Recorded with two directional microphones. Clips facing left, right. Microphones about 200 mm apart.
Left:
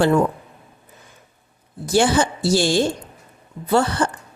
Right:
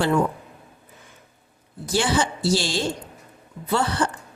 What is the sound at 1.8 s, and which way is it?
Speech, 50° left (ahead or behind).